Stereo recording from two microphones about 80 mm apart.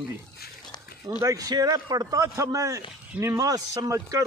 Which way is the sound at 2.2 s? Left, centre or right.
Right.